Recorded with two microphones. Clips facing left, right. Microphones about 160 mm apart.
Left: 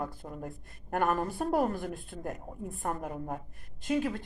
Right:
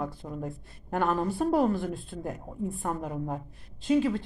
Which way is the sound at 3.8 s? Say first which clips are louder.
Right 5 dB; 55° left (ahead or behind).